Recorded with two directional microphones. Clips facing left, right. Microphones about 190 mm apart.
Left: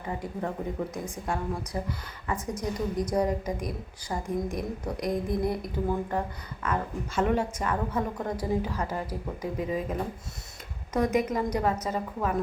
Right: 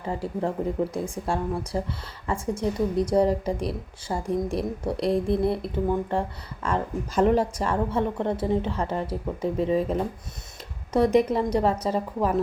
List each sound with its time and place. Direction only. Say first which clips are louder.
0.0 s a woman's voice: right 5 dB; 30° right (ahead or behind)